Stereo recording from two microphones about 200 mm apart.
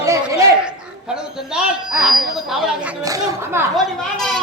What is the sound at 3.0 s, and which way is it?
Speech, 15° right (ahead or behind).